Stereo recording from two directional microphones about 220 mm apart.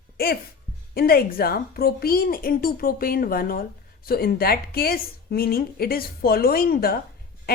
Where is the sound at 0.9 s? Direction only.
45° left (ahead or behind).